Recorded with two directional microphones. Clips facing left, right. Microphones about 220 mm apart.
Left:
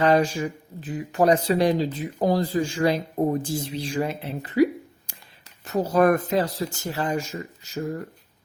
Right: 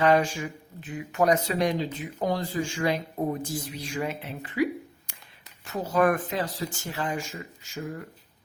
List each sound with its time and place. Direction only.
0.0 s speech: 35° left (ahead or behind)